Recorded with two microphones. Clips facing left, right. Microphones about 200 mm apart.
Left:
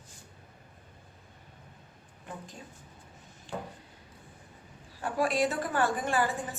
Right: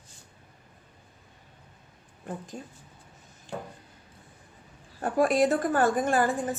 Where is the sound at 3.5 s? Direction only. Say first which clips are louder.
Right 1 dB; 45° right (ahead or behind).